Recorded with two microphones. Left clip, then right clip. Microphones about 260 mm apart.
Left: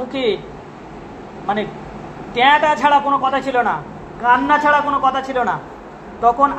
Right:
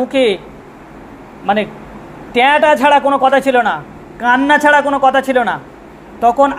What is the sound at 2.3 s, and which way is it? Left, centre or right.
A man's voice, right.